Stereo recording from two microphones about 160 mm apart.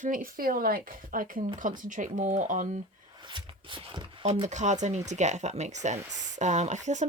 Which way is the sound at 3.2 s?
30° right (ahead or behind).